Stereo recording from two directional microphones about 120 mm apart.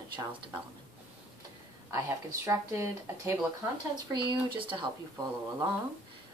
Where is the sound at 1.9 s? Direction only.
25° right (ahead or behind).